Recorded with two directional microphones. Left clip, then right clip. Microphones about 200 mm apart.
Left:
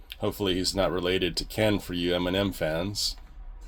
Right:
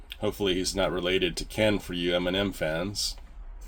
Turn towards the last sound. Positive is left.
turn(degrees=30)  # may be behind; listen again after turning